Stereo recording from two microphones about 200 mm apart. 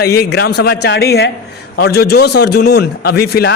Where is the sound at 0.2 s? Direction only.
55° left (ahead or behind).